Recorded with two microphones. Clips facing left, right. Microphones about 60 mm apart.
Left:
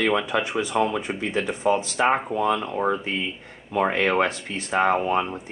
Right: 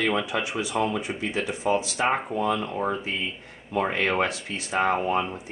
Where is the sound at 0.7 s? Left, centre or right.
Left.